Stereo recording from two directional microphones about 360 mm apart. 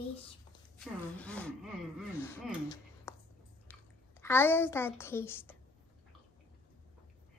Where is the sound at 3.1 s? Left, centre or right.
Centre.